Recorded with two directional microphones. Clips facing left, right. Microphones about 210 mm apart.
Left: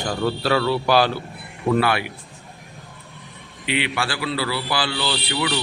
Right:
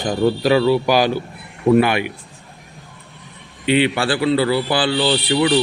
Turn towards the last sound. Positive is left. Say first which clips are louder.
# right 8 dB
turn(degrees=-30)  # may be behind; listen again after turning